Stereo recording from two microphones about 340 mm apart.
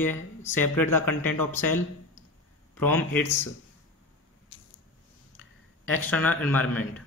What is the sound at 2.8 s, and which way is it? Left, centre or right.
Speech, centre.